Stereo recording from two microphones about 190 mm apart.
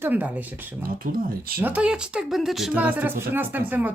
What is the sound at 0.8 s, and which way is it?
Speech, 50° right (ahead or behind).